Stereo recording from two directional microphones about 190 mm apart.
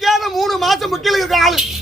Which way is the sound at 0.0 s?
Centre (ahead or behind).